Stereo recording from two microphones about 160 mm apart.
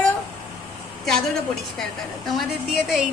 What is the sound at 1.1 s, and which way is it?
A woman's voice, centre (ahead or behind).